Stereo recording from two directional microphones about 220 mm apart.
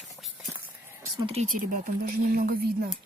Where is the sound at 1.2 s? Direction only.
30° right (ahead or behind).